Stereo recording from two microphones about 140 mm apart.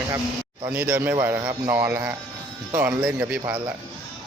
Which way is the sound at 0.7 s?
15° right (ahead or behind).